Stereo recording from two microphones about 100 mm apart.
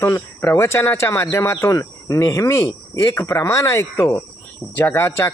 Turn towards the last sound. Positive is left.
turn(degrees=25)  # may be behind; listen again after turning